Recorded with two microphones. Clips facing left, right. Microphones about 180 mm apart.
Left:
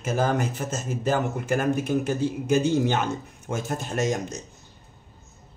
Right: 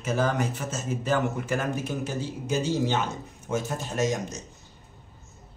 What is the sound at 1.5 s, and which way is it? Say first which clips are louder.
A man's voice: left 5 dB; 55° left (ahead or behind).